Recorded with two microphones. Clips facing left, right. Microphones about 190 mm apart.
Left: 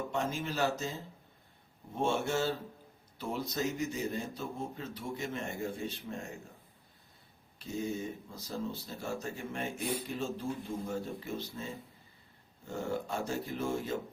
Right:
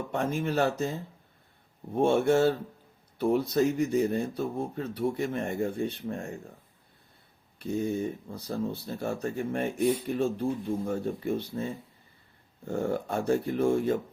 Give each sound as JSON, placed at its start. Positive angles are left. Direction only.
{"t": 0.1, "sound": "speech", "side_deg": -55}
{"t": 7.9, "sound": "speech", "side_deg": -60}
{"t": 12.6, "sound": "speech", "side_deg": -55}